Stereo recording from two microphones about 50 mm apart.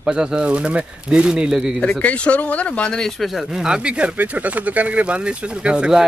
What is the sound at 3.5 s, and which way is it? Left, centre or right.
Speech, centre.